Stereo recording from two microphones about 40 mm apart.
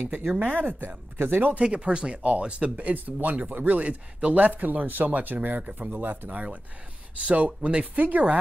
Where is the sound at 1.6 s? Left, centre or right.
Right.